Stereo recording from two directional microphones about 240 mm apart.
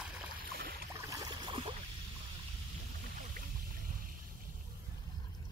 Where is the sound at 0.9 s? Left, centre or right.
Centre.